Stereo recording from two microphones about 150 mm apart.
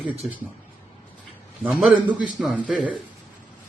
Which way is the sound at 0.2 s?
10° right (ahead or behind).